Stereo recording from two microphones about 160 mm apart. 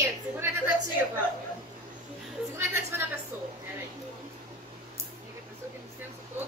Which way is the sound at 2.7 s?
15° right (ahead or behind).